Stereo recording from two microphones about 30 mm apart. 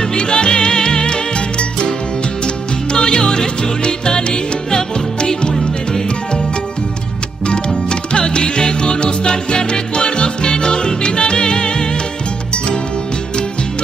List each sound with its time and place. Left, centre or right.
0.0 s music: left
7.4 s music: left